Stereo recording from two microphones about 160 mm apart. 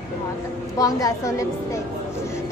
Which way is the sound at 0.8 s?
20° left (ahead or behind).